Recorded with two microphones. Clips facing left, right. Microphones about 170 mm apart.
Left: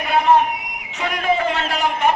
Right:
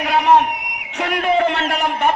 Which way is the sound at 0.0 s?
80° right.